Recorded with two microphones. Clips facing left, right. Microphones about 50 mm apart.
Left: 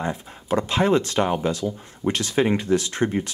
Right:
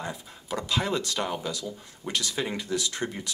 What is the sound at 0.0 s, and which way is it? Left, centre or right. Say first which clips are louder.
Speech: left 8 dB; left.